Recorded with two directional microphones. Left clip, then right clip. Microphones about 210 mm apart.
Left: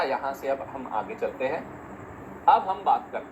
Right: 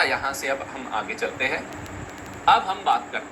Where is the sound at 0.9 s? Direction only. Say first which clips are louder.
Right 3 dB; 20° right (ahead or behind).